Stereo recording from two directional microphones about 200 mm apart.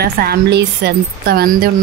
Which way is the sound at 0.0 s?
50° right (ahead or behind).